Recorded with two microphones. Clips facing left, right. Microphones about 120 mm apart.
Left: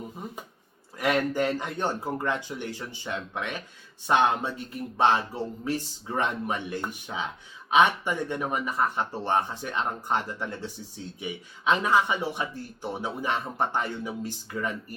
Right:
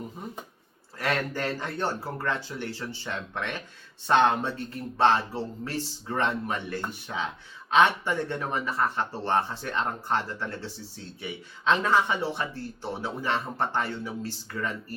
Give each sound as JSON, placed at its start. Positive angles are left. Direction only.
{"t": 0.9, "sound": "speech", "side_deg": 15}